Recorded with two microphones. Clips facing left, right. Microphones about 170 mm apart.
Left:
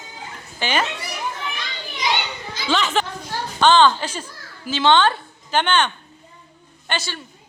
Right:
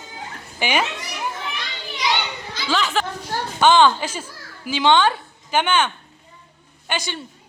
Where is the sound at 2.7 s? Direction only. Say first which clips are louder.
Left 1 dB; centre (ahead or behind).